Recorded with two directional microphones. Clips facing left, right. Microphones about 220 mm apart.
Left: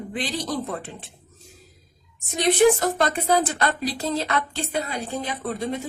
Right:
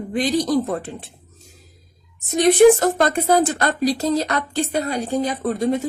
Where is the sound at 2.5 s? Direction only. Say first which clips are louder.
Right 6 dB; 50° right (ahead or behind).